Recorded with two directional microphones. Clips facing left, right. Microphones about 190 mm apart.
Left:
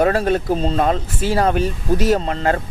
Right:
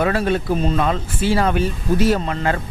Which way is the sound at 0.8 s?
40° left (ahead or behind).